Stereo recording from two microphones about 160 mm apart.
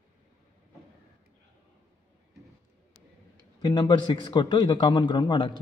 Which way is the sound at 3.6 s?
25° left (ahead or behind).